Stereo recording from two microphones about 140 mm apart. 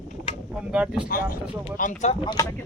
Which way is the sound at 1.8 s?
60° left (ahead or behind).